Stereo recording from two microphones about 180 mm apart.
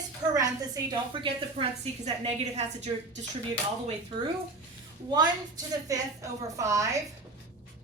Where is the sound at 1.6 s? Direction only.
35° right (ahead or behind).